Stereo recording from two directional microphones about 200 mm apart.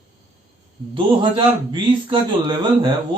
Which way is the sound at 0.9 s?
25° right (ahead or behind).